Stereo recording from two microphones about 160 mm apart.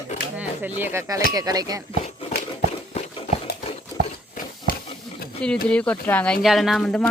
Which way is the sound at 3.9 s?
25° left (ahead or behind).